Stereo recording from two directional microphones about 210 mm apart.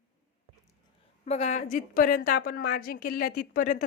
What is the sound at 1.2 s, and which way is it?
A woman's voice, 30° left (ahead or behind).